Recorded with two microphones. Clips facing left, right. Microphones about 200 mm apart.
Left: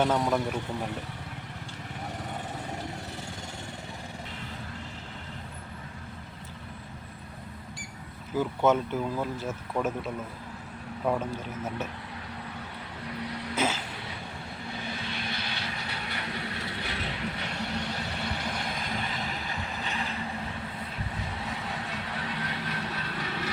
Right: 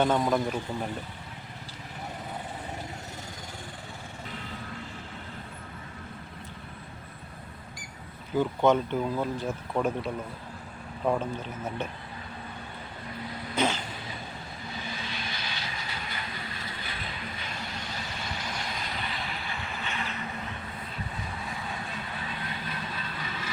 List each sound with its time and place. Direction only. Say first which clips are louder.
0.0 s speech: right 1 dB; 5° left (ahead or behind)
8.4 s speech: right 1 dB; 5° left (ahead or behind)
11.0 s speech: right 1 dB; 5° left (ahead or behind)
13.1 s vehicle: left 3 dB; 75° left (ahead or behind)
13.6 s vehicle: right 2 dB; 5° left (ahead or behind)
15.1 s vehicle: left 2 dB; 60° left (ahead or behind); by 20.1 s 35° left (ahead or behind)
21.8 s vehicle: left 2 dB; 75° left (ahead or behind)